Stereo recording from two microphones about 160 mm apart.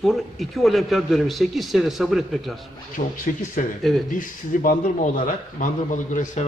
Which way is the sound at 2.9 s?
55° left (ahead or behind).